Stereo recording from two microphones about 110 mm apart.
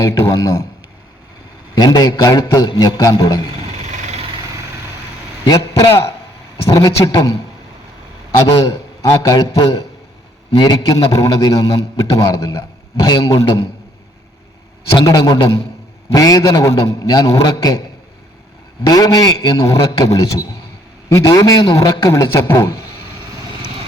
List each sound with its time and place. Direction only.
0.0 s a man's voice: 30° left (ahead or behind)
1.7 s a man's voice: 35° left (ahead or behind)
3.9 s vehicle: 90° right
5.5 s a man's voice: 30° left (ahead or behind)
8.4 s a man's voice: 30° left (ahead or behind)
14.9 s a man's voice: 35° left (ahead or behind)
18.9 s a man's voice: 35° left (ahead or behind)